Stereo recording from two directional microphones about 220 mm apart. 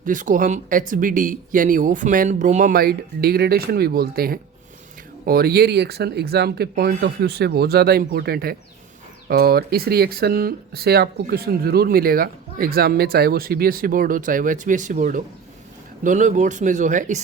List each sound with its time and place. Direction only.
0.0 s speech: 35° right (ahead or behind)